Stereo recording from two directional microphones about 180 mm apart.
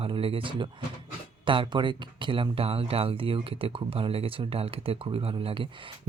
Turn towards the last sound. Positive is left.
turn(degrees=-30)  # may be behind; listen again after turning